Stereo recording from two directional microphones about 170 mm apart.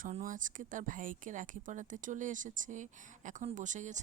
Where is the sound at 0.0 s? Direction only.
50° right (ahead or behind).